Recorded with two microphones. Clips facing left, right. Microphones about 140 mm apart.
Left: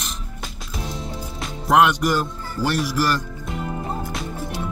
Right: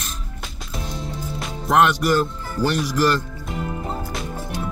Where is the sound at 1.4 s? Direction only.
5° left (ahead or behind).